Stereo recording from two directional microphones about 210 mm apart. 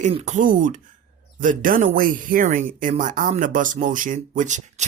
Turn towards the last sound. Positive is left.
turn(degrees=-35)  # may be behind; listen again after turning